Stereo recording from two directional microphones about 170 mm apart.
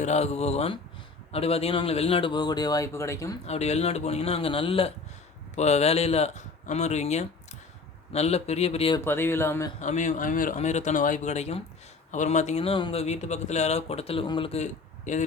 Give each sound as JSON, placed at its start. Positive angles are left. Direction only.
{"t": 0.0, "sound": "speech", "side_deg": 40}
{"t": 3.4, "sound": "speech", "side_deg": 40}
{"t": 9.0, "sound": "speech", "side_deg": 15}
{"t": 9.8, "sound": "speech", "side_deg": 45}